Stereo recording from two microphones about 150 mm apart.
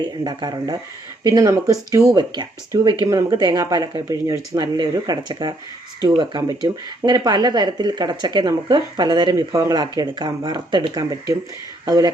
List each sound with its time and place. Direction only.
0.3 s speech: 30° right (ahead or behind)